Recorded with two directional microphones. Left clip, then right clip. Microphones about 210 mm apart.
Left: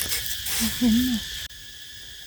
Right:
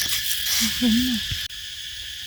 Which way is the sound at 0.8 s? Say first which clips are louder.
Left 2 dB; 25° left (ahead or behind).